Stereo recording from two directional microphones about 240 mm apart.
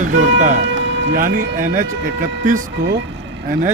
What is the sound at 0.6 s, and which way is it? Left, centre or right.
Music, right.